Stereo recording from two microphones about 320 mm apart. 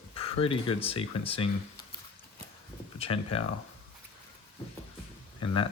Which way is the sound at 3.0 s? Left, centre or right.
Centre.